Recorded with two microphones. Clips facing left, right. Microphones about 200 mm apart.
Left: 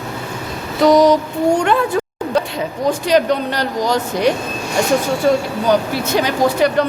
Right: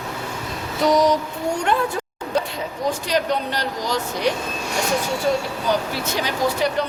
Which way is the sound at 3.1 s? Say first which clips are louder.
Left 8 dB; 65° left (ahead or behind).